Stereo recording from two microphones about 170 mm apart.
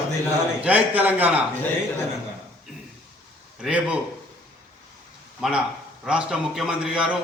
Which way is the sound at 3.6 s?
5° right (ahead or behind).